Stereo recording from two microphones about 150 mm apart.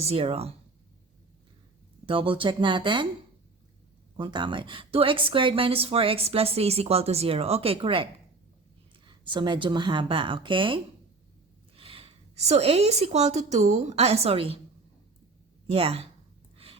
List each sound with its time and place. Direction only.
0.0 s speech: 45° right (ahead or behind)
2.0 s speech: 35° right (ahead or behind)
4.2 s speech: 30° right (ahead or behind)
9.0 s speech: 30° right (ahead or behind)
11.8 s a woman's voice: 40° right (ahead or behind)
15.6 s speech: 40° right (ahead or behind)